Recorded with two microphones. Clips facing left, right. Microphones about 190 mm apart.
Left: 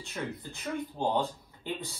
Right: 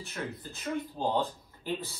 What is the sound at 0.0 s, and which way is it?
Speech, 15° left (ahead or behind).